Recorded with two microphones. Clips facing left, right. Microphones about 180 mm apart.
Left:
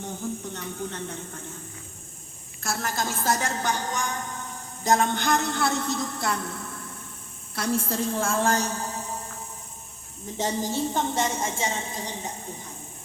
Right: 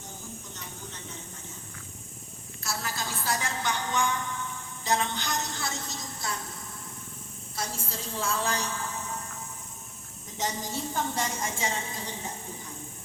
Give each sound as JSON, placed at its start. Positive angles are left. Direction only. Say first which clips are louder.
{"t": 0.0, "sound": "a sound", "louder": "left 11 dB", "side_deg": 60}
{"t": 2.6, "sound": "a woman's voice", "louder": "left 6 dB", "side_deg": 50}
{"t": 10.3, "sound": "a woman's voice", "louder": "left 6 dB", "side_deg": 30}